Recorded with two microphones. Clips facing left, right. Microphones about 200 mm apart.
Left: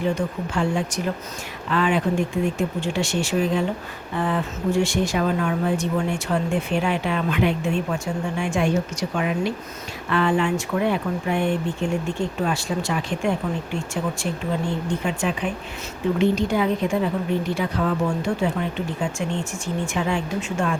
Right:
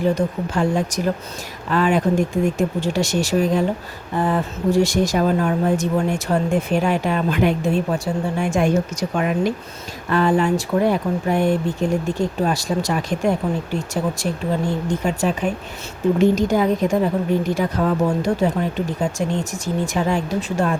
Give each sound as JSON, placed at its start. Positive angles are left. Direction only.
{"t": 0.0, "sound": "a woman's voice", "side_deg": -40}